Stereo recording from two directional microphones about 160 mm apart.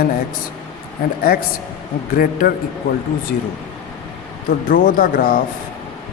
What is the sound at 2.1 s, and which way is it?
Speech, 65° left (ahead or behind).